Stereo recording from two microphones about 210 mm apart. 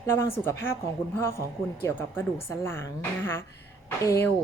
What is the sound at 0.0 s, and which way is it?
A woman's voice, 15° left (ahead or behind).